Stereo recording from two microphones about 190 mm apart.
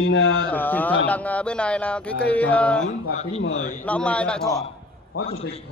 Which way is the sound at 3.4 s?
90° left.